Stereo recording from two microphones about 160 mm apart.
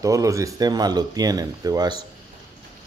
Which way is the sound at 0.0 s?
20° right (ahead or behind).